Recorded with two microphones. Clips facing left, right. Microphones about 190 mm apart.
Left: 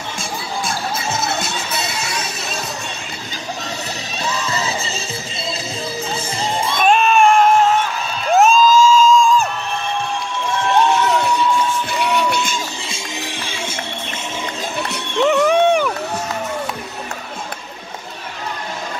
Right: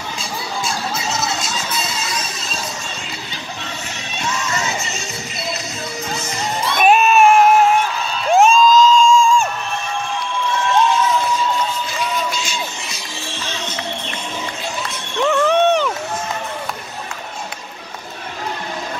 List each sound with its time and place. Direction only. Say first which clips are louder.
0.7 s music: left 1 dB; 55° left (ahead or behind)
4.2 s music: even; 35° left (ahead or behind)
6.8 s a sound: right 1 dB; 5° right (ahead or behind)
8.3 s music: even; centre (ahead or behind)
10.9 s crowd: left 1 dB; 70° left (ahead or behind)
11.9 s music: left 4 dB; 65° left (ahead or behind)
12.9 s music: left 3 dB; 15° left (ahead or behind)
15.1 s a sound: left 1 dB; 15° left (ahead or behind)